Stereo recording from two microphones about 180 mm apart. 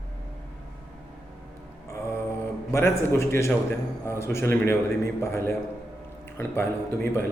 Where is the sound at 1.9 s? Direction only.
15° left (ahead or behind).